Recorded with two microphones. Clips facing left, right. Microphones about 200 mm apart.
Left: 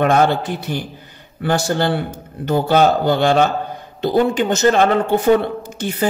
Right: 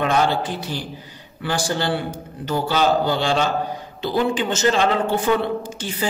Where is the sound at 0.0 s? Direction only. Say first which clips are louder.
Left 5 dB; 50° left (ahead or behind).